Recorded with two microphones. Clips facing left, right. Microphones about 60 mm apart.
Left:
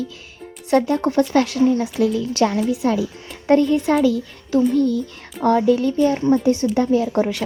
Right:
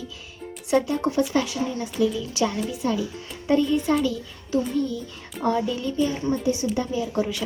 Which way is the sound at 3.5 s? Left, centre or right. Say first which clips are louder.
Left 5 dB; left.